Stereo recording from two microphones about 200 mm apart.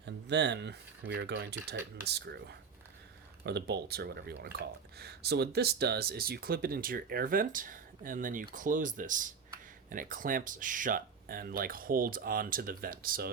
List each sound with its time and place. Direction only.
0.0 s speech: 60° right (ahead or behind)